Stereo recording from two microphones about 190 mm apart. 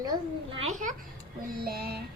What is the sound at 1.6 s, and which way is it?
Music, 55° right (ahead or behind).